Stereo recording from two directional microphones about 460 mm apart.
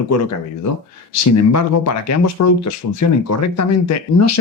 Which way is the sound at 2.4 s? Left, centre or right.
Left.